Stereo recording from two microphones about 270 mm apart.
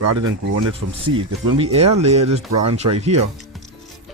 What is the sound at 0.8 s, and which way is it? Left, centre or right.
Speech, right.